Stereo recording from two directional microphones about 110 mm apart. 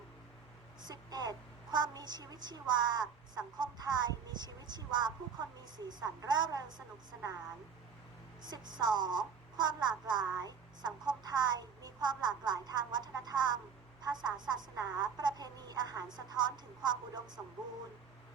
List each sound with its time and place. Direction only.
0.8 s a woman's voice: 40° right (ahead or behind)
8.4 s a woman's voice: 40° right (ahead or behind)